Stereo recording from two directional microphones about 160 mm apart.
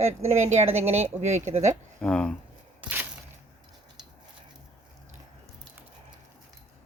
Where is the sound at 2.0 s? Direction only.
10° left (ahead or behind).